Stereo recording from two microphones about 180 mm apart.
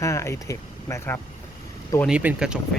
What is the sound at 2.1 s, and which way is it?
Speech, 5° right (ahead or behind).